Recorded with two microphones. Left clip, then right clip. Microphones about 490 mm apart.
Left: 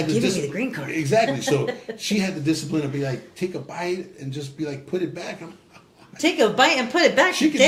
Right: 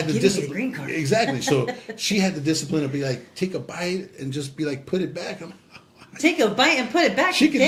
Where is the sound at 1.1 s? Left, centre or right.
Right.